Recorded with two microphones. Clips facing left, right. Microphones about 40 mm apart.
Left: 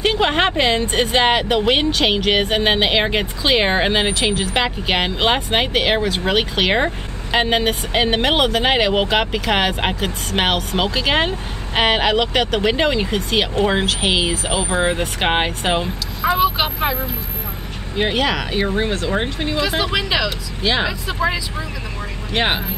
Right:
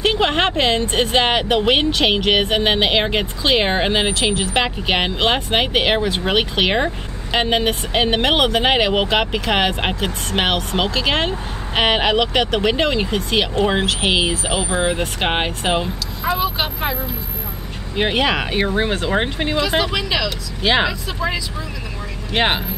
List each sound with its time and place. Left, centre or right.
0.2 s speech: centre
5.7 s speech: centre
7.3 s speech: centre
14.7 s speech: centre
17.9 s speech: centre
19.8 s speech: centre
20.6 s speech: centre
22.3 s speech: centre